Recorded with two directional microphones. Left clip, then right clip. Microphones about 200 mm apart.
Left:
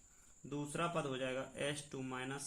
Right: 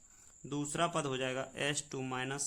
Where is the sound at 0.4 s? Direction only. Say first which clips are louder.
Right 6 dB; 55° right (ahead or behind).